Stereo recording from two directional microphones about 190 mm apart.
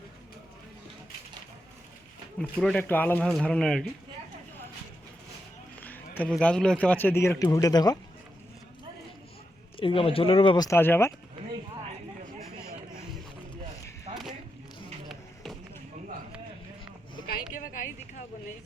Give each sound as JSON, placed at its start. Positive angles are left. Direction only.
{"t": 2.4, "sound": "speech", "side_deg": 5}
{"t": 5.8, "sound": "a man's voice", "side_deg": 10}
{"t": 9.7, "sound": "speech", "side_deg": 30}
{"t": 14.1, "sound": "a sound", "side_deg": -30}